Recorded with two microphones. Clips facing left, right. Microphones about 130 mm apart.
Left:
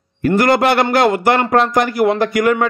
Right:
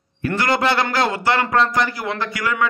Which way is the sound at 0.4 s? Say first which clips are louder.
Left 5 dB; 50° left (ahead or behind).